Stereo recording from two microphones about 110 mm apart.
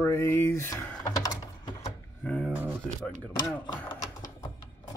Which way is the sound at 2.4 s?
15° right (ahead or behind).